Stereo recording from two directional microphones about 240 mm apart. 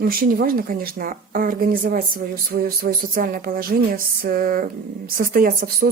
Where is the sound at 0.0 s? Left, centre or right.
Right.